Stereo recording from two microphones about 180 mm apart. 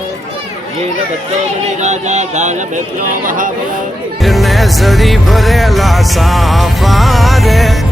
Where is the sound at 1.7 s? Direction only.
40° right (ahead or behind).